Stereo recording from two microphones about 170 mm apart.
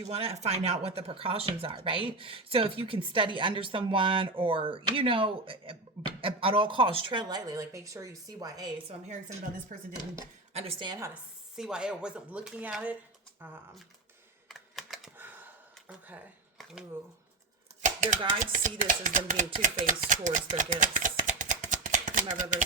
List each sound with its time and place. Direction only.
0.0 s a woman's voice: 35° right (ahead or behind)
9.7 s speech: 55° right (ahead or behind)
10.5 s a woman's voice: 35° right (ahead or behind)
11.1 s speech: 5° right (ahead or behind)
14.4 s computer keyboard: centre (ahead or behind)
15.9 s speech: 10° right (ahead or behind)
17.8 s typewriter: 50° right (ahead or behind)
18.3 s chopping: 50° right (ahead or behind)
19.5 s speech: 50° right (ahead or behind)